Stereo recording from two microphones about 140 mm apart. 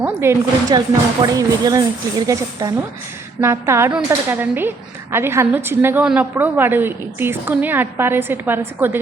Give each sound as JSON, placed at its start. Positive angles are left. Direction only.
{"t": 0.0, "sound": "a woman's voice", "side_deg": -15}